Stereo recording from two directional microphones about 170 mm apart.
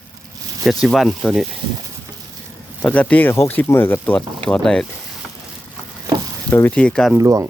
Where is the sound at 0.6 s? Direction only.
Centre (ahead or behind).